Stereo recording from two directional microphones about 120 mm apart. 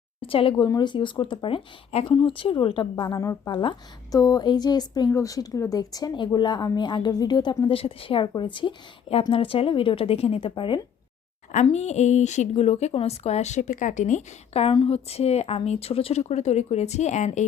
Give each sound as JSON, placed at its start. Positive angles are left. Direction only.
{"t": 0.2, "sound": "speech", "side_deg": 50}
{"t": 0.6, "sound": "speech", "side_deg": 40}
{"t": 2.0, "sound": "speech", "side_deg": 40}
{"t": 2.9, "sound": "a woman's voice", "side_deg": 30}
{"t": 3.5, "sound": "a woman's voice", "side_deg": 40}
{"t": 7.7, "sound": "speech", "side_deg": 50}
{"t": 10.5, "sound": "a woman's voice", "side_deg": 40}
{"t": 11.5, "sound": "a woman's voice", "side_deg": 65}